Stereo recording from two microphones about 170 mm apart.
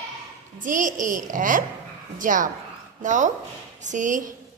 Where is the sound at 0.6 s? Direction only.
50° right (ahead or behind).